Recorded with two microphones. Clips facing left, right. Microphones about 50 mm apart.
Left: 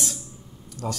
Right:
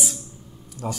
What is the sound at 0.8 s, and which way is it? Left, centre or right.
Speech, right.